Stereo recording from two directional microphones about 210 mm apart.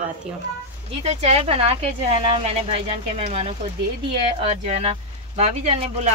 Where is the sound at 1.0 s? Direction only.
30° right (ahead or behind).